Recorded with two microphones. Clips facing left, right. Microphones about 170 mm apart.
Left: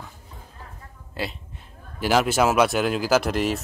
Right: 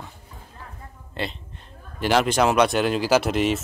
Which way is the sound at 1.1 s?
5° left (ahead or behind).